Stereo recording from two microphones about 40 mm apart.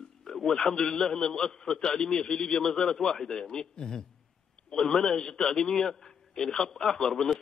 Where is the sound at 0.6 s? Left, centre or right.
Centre.